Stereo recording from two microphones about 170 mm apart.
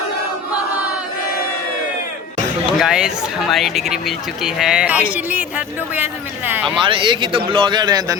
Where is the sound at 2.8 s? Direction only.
5° right (ahead or behind).